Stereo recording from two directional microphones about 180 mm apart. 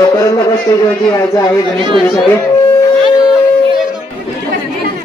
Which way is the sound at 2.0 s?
5° left (ahead or behind).